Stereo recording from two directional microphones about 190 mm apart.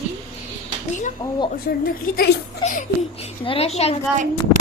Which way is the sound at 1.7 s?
55° left (ahead or behind).